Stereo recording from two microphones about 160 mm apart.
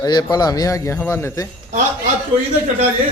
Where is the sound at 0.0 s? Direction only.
25° left (ahead or behind).